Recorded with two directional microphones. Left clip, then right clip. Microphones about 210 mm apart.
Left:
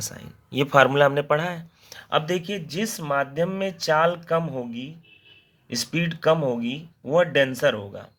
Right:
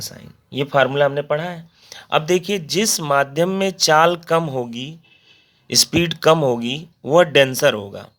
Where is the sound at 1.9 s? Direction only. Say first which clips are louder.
Right 6 dB; 20° right (ahead or behind).